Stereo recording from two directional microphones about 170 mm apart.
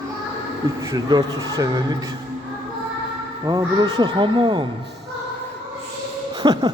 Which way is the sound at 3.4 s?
20° right (ahead or behind).